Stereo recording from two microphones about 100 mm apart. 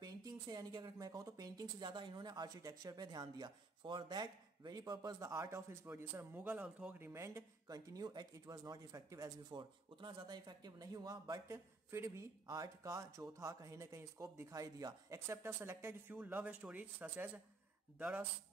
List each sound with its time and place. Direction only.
0.0 s a woman's voice: 40° right (ahead or behind)
5.2 s speech: 30° right (ahead or behind)
9.5 s speech: 50° right (ahead or behind); by 18.2 s 15° right (ahead or behind)